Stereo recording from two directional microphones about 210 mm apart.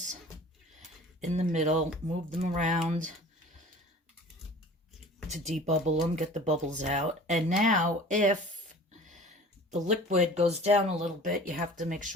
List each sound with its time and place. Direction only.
0.8 s a sound: 35° right (ahead or behind)
2.4 s speech: 35° right (ahead or behind)
5.3 s speech: 35° right (ahead or behind)
10.1 s speech: 30° right (ahead or behind)